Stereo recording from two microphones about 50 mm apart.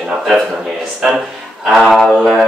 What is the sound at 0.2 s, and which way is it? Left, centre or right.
Mantra, centre.